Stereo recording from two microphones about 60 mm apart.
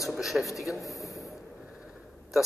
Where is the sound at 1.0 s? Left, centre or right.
Centre.